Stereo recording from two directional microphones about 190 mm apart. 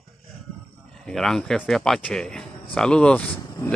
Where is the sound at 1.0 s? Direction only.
Centre (ahead or behind).